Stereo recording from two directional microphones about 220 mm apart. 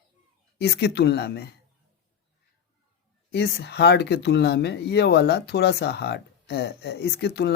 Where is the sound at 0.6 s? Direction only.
45° left (ahead or behind).